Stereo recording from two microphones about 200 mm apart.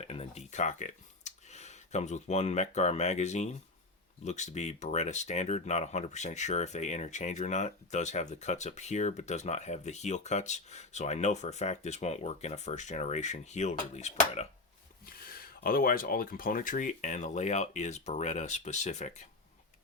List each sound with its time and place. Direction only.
0.0 s speech: 30° left (ahead or behind)
15.0 s speech: 45° left (ahead or behind)